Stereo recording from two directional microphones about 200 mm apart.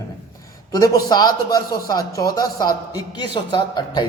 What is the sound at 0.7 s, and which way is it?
A man's voice, 20° left (ahead or behind).